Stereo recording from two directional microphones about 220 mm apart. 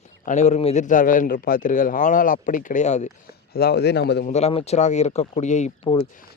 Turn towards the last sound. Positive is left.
turn(degrees=25)  # may be behind; listen again after turning